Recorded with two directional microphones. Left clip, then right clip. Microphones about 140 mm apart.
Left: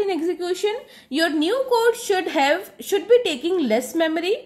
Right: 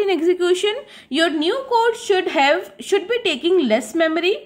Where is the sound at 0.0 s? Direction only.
35° right (ahead or behind).